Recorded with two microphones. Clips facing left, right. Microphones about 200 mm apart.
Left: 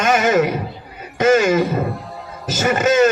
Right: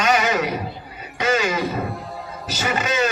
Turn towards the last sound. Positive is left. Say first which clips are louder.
# left 8 dB
turn(degrees=45)  # may be behind; listen again after turning